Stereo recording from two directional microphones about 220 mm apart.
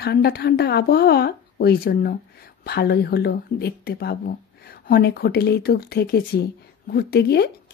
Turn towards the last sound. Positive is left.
turn(degrees=45)  # may be behind; listen again after turning